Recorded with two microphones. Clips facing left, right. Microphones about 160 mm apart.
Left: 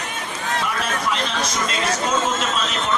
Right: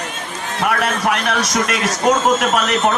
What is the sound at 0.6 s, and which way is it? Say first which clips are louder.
A man's voice: right 10 dB; 70° right (ahead or behind).